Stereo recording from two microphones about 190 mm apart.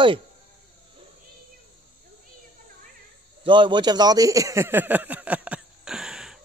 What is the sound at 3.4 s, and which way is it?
Speech, 25° right (ahead or behind).